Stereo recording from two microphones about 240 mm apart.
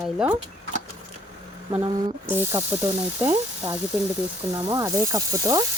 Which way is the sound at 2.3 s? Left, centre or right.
Centre.